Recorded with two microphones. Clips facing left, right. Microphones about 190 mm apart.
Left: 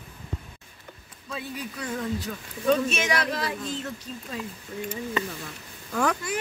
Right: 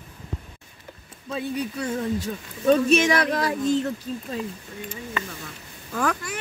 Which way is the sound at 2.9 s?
50° right (ahead or behind).